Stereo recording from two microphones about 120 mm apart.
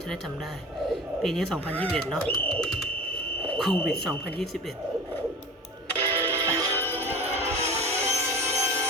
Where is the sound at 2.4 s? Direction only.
5° left (ahead or behind).